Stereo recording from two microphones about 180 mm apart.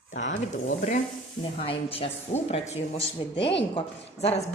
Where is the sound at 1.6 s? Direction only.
30° left (ahead or behind).